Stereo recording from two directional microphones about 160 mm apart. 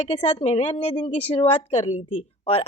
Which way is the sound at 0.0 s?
40° left (ahead or behind).